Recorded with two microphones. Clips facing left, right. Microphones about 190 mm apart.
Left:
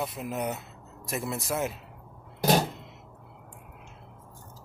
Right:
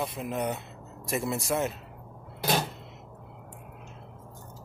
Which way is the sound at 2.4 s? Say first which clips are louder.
Left 4 dB; 40° left (ahead or behind).